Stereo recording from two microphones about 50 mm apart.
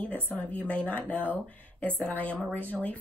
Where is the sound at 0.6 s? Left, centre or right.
Left.